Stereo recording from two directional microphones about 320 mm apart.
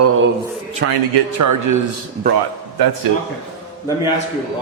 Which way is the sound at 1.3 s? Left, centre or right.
Right.